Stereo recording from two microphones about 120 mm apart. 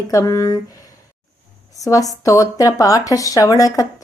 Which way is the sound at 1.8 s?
30° left (ahead or behind).